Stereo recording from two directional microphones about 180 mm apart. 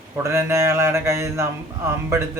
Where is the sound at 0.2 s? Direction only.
15° right (ahead or behind).